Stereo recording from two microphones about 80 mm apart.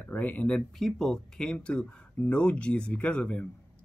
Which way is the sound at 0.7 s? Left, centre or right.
Centre.